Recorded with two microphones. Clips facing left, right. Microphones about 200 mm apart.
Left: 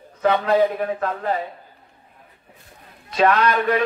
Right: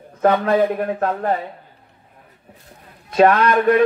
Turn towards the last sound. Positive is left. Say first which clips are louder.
# right 4 dB
turn(degrees=-50)  # may be behind; listen again after turning